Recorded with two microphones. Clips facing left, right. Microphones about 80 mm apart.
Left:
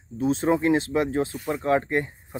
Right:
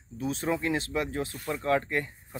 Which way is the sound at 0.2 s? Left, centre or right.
Left.